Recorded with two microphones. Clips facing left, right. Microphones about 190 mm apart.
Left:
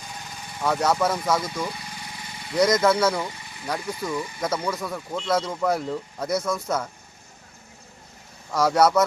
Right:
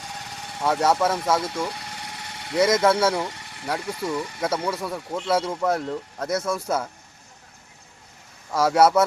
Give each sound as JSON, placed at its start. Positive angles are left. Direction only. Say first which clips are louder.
{"t": 0.0, "sound": "engine", "louder": "right 2 dB", "side_deg": -70}
{"t": 0.6, "sound": "speech", "louder": "right 1 dB", "side_deg": -5}
{"t": 1.4, "sound": "vehicle", "louder": "right 2 dB", "side_deg": -70}
{"t": 2.8, "sound": "speech", "louder": "right 1 dB", "side_deg": -5}
{"t": 3.2, "sound": "a sound", "louder": "right 1 dB", "side_deg": -70}
{"t": 3.8, "sound": "speech", "louder": "right 1 dB", "side_deg": -70}
{"t": 4.4, "sound": "speech", "louder": "even", "side_deg": -5}
{"t": 8.5, "sound": "speech", "louder": "right 1 dB", "side_deg": -5}